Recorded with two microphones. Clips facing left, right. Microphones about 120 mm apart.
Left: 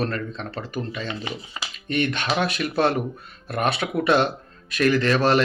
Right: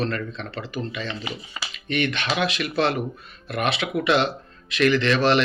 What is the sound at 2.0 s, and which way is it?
A man's voice, 45° left (ahead or behind).